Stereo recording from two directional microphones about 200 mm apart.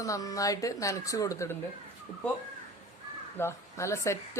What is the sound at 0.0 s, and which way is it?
Speech, 15° left (ahead or behind).